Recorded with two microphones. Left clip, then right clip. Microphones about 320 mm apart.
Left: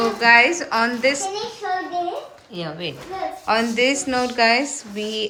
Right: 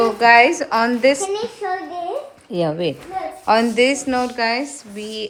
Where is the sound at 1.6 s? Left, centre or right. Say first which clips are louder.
Even; centre.